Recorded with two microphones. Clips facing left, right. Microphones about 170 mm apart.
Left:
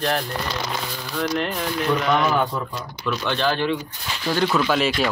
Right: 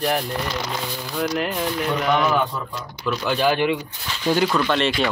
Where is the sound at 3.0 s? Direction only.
5° right (ahead or behind).